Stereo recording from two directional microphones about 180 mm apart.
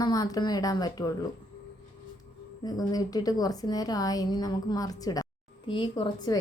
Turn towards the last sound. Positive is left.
turn(degrees=25)  # may be behind; listen again after turning